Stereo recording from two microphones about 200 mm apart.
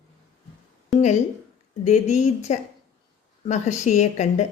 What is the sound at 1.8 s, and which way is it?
Speech, 35° left (ahead or behind).